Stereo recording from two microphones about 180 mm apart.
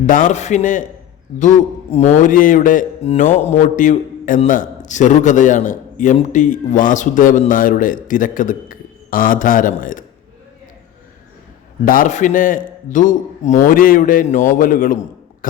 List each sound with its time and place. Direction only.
0.1 s a man's voice: 45° left (ahead or behind)
1.9 s a man's voice: 40° left (ahead or behind)
11.9 s a man's voice: 45° left (ahead or behind)